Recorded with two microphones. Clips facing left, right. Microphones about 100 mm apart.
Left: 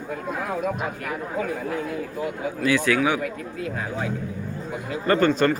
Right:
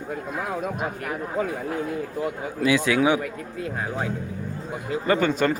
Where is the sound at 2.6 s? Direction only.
20° right (ahead or behind).